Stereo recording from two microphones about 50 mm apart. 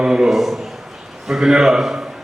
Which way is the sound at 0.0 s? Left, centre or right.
Centre.